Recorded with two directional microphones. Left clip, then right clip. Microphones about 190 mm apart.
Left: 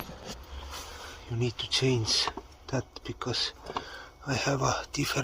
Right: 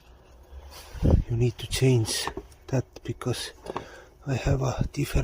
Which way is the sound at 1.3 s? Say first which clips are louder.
Even; 50° right (ahead or behind).